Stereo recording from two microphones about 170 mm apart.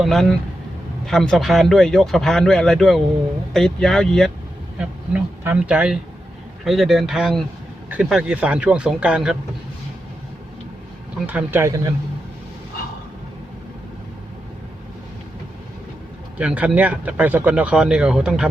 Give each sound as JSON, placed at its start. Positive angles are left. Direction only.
{"t": 0.0, "sound": "speech", "side_deg": 0}
{"t": 4.8, "sound": "speech", "side_deg": -10}
{"t": 11.3, "sound": "speech", "side_deg": -10}
{"t": 16.4, "sound": "speech", "side_deg": -5}